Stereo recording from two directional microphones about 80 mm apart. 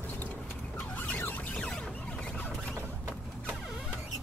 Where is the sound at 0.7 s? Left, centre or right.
Left.